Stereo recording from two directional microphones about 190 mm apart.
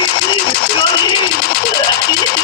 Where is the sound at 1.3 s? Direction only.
50° left (ahead or behind).